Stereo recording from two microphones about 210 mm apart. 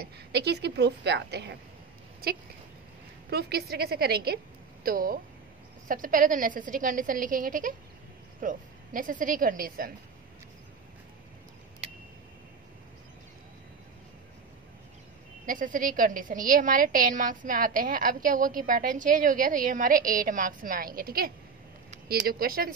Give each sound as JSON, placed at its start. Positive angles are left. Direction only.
{"t": 0.3, "sound": "a woman's voice", "side_deg": -50}
{"t": 15.4, "sound": "a woman's voice", "side_deg": -40}